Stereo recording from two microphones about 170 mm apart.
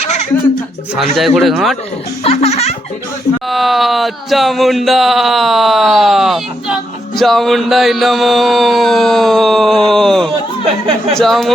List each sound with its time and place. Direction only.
0.9 s speech: centre (ahead or behind)
2.2 s music: 35° left (ahead or behind)
3.5 s speech: centre (ahead or behind)